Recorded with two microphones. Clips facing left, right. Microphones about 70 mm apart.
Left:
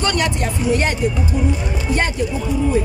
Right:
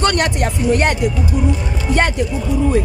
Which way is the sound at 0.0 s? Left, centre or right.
Right.